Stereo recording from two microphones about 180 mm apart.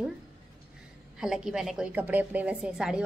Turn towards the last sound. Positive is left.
turn(degrees=-5)  # may be behind; listen again after turning